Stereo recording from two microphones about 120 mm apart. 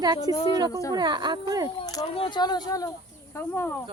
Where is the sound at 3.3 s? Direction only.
20° left (ahead or behind).